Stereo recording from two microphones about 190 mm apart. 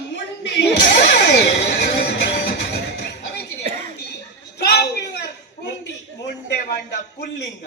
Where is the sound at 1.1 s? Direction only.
65° left (ahead or behind).